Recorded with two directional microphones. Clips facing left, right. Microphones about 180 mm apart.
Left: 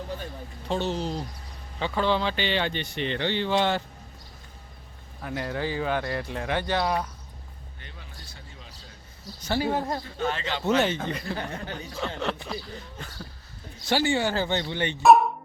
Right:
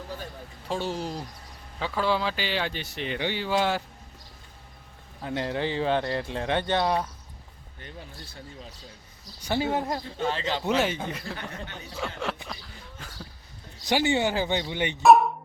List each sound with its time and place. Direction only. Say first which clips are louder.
0.7 s speech: left 2 dB; 10° right (ahead or behind)
5.2 s speech: right 2 dB; 25° right (ahead or behind)
7.8 s speech: right 7 dB; 45° right (ahead or behind)
9.4 s speech: even; 15° right (ahead or behind)
10.2 s speech: right 1 dB; 35° right (ahead or behind)
10.7 s speech: left 3 dB; 5° right (ahead or behind)
13.8 s speech: even; 20° right (ahead or behind)
15.0 s speech: even; centre (ahead or behind)